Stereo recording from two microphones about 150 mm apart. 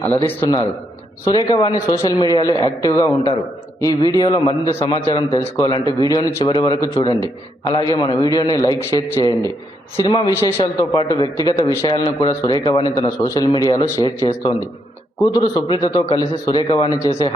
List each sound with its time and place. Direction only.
0.0 s a man's voice: 15° left (ahead or behind)
0.4 s a man's voice: 25° left (ahead or behind)